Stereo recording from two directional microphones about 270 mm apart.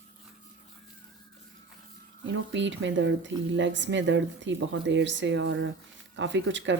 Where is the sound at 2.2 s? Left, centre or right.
Right.